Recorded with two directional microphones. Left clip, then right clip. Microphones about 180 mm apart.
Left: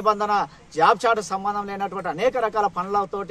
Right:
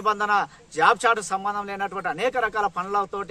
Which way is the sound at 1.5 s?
40° right (ahead or behind).